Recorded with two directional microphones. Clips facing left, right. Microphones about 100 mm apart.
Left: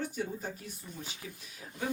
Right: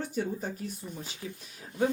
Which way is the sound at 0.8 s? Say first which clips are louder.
Right 6 dB; 10° right (ahead or behind).